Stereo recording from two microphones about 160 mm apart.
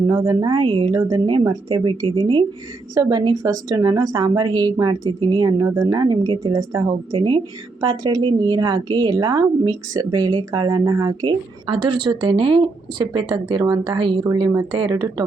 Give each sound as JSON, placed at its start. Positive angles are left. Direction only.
{"t": 0.1, "sound": "speech", "side_deg": -15}
{"t": 0.4, "sound": "a woman's voice", "side_deg": -30}